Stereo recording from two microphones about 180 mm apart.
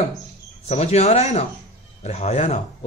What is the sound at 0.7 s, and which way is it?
Speech, 35° left (ahead or behind).